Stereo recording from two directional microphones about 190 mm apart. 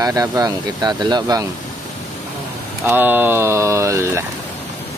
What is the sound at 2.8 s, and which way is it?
Speech, 10° right (ahead or behind).